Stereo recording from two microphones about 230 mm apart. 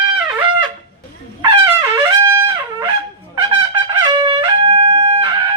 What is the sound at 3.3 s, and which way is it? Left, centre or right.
Trumpet, centre.